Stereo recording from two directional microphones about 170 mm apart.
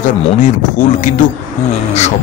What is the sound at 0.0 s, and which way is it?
Speech, 50° left (ahead or behind).